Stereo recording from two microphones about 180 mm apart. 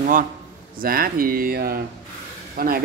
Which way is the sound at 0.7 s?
55° right (ahead or behind).